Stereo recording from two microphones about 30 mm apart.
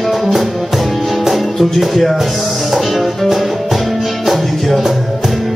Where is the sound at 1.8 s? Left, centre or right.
Centre.